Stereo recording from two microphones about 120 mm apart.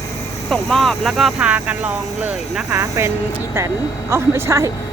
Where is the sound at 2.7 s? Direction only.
20° right (ahead or behind).